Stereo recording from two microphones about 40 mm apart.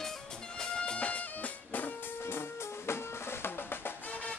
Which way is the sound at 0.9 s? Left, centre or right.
Left.